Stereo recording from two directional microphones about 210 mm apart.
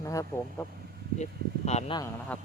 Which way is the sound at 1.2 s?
30° left (ahead or behind).